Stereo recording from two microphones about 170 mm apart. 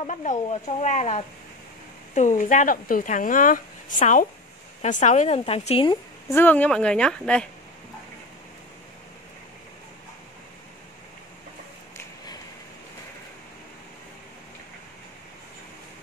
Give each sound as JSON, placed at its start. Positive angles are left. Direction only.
{"t": 0.0, "sound": "speech", "side_deg": 45}
{"t": 6.3, "sound": "speech", "side_deg": 10}